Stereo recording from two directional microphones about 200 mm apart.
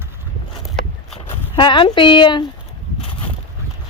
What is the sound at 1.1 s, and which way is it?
Speech, 30° left (ahead or behind).